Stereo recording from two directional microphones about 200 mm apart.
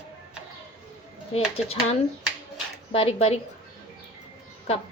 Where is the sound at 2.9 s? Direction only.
30° left (ahead or behind).